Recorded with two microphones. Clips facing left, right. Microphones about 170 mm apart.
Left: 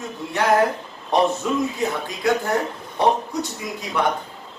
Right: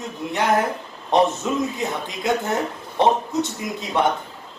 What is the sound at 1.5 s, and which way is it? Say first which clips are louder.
Speech: left 1 dB; 20° right (ahead or behind).